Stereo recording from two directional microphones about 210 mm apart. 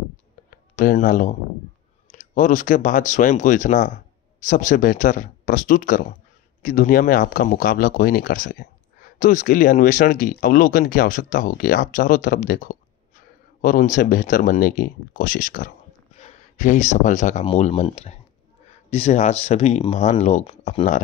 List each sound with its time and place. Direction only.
0.7 s speech: 40° left (ahead or behind)